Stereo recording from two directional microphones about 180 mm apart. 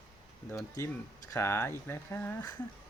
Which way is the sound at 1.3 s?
15° left (ahead or behind).